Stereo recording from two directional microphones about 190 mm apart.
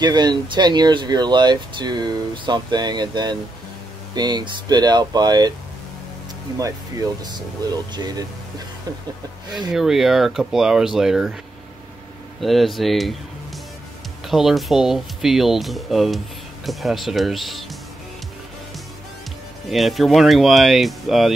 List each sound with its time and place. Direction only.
0.0 s speech: 20° right (ahead or behind)
6.6 s speech: 20° right (ahead or behind)
9.7 s speech: centre (ahead or behind)
12.4 s speech: centre (ahead or behind)
14.2 s speech: centre (ahead or behind)
19.7 s speech: centre (ahead or behind)